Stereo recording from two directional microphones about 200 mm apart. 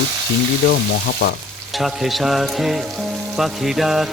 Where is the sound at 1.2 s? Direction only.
55° left (ahead or behind).